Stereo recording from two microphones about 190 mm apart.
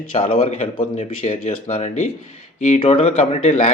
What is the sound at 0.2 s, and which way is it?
Speech, 30° left (ahead or behind).